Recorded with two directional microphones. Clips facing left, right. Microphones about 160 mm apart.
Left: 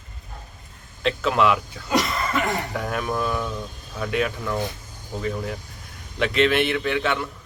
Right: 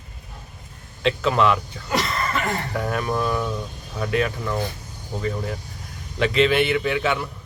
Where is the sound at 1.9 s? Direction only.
15° left (ahead or behind).